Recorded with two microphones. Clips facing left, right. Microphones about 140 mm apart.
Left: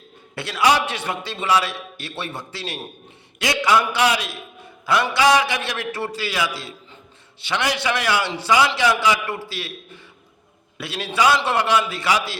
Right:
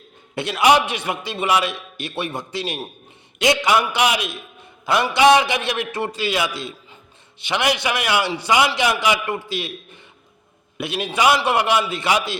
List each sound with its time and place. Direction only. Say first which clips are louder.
0.3 s a man's voice: right 3 dB; 20° right (ahead or behind)